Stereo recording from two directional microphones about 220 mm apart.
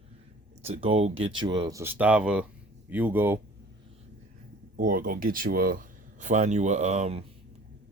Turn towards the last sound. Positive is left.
turn(degrees=-30)  # may be behind; listen again after turning